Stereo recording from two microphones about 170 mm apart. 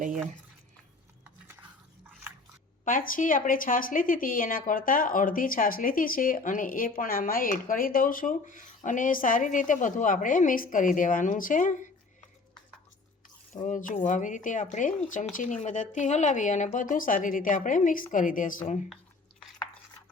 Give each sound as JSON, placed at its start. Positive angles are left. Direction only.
{"t": 2.8, "sound": "speech", "side_deg": 55}
{"t": 13.5, "sound": "speech", "side_deg": 50}